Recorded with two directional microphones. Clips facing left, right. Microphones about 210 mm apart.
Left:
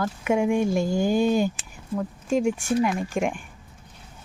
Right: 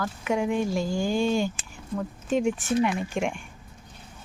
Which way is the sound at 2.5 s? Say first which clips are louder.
Left 1 dB; 10° left (ahead or behind).